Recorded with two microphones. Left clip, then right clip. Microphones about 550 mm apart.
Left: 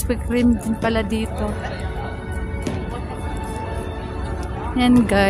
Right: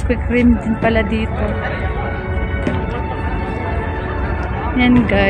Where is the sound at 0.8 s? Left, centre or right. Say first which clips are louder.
Right 5 dB; left.